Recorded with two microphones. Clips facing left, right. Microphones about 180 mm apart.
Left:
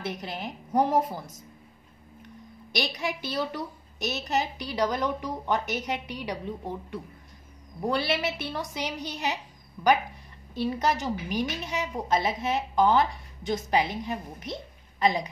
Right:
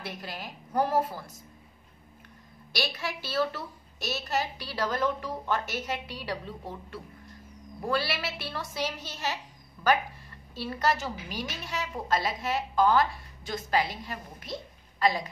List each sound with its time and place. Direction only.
0.0 s a woman's voice: 20° left (ahead or behind)
2.7 s a woman's voice: 15° left (ahead or behind)